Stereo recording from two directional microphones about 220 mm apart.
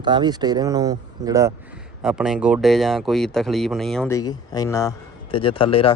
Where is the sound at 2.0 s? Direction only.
5° right (ahead or behind).